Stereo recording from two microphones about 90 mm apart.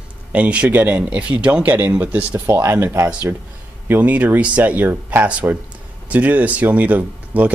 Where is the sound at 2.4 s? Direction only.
30° right (ahead or behind).